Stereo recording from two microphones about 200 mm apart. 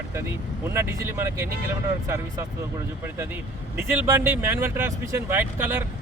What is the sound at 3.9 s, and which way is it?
Speech, 10° right (ahead or behind).